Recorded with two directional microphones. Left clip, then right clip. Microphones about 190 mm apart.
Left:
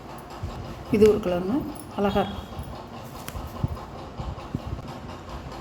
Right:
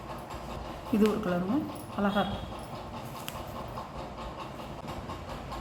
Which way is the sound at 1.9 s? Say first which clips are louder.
Left 5 dB; 40° left (ahead or behind).